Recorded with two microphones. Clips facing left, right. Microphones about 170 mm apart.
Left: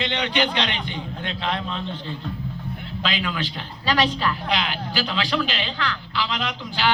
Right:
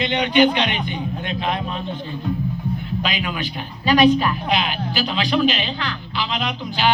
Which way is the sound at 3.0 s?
15° right (ahead or behind).